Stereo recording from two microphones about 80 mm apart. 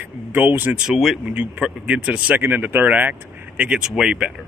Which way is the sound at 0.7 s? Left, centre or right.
Centre.